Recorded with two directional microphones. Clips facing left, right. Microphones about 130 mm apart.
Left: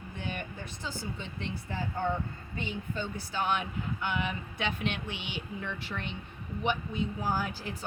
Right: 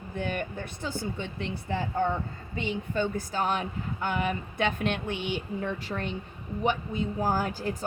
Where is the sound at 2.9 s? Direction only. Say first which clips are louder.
Right 11 dB; 60° right (ahead or behind).